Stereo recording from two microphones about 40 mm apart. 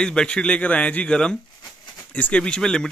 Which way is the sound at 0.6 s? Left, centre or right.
Left.